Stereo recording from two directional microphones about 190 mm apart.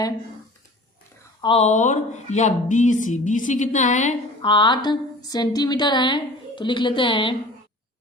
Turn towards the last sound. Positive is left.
turn(degrees=25)  # may be behind; listen again after turning